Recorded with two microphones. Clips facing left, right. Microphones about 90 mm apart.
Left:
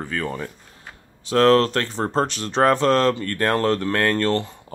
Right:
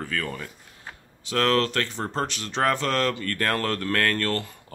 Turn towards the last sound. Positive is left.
turn(degrees=25)  # may be behind; listen again after turning